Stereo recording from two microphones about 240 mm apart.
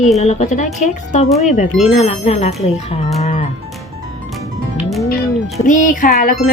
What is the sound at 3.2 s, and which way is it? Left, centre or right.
Music, left.